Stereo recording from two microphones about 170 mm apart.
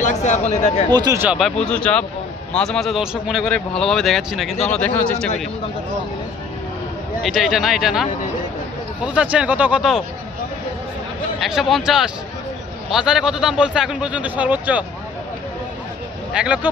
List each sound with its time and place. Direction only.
0.0 s speech: 45° left (ahead or behind)
0.8 s speech: 25° right (ahead or behind)
1.4 s a man's voice: 5° left (ahead or behind)
7.2 s a man's voice: centre (ahead or behind)
11.3 s a man's voice: centre (ahead or behind)
16.3 s speech: 5° right (ahead or behind)